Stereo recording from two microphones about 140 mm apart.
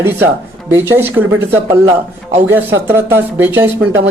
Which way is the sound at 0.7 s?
15° right (ahead or behind).